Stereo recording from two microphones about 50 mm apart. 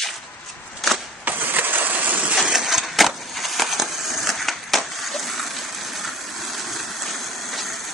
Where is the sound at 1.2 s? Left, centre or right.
Right.